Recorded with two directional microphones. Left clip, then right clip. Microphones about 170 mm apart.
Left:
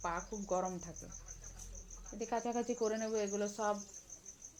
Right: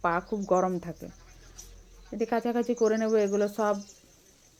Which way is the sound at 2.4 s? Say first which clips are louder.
Right 10 dB; 5° right (ahead or behind).